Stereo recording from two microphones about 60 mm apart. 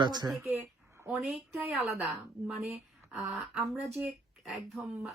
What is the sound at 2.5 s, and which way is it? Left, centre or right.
Speech, centre.